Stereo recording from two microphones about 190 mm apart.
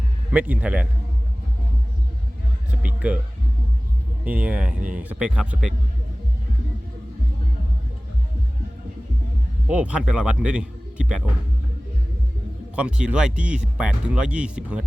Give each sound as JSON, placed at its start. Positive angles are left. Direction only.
{"t": 0.3, "sound": "speech", "side_deg": -5}
{"t": 2.8, "sound": "music", "side_deg": -5}
{"t": 4.2, "sound": "speech", "side_deg": -10}
{"t": 9.6, "sound": "a man's voice", "side_deg": -5}
{"t": 12.7, "sound": "speech", "side_deg": -5}